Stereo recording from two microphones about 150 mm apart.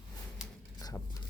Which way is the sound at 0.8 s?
25° left (ahead or behind).